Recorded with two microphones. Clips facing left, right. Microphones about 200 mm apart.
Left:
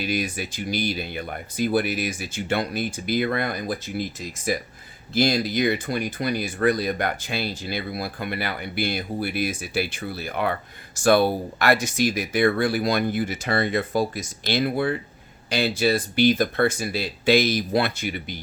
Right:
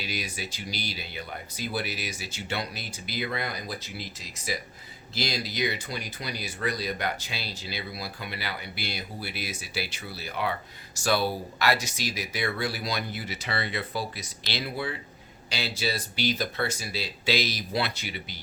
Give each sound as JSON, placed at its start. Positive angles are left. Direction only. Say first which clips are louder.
{"t": 0.0, "sound": "speech", "louder": "left 9 dB", "side_deg": 50}